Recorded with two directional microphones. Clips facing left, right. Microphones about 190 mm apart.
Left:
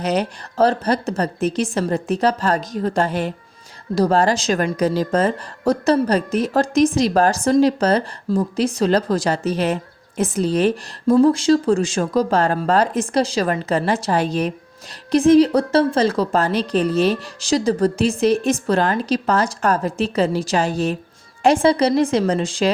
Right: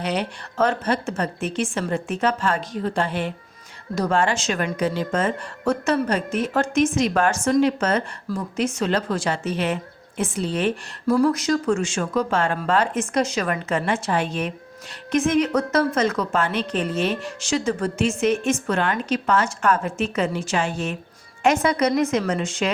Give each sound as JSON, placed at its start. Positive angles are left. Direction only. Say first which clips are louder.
{"t": 0.0, "sound": "a woman's voice", "louder": "left 5 dB", "side_deg": 40}
{"t": 11.1, "sound": "a woman's voice", "louder": "left 5 dB", "side_deg": 25}